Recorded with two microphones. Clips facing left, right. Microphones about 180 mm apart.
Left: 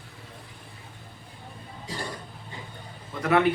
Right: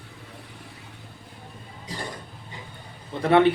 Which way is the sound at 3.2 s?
30° right (ahead or behind).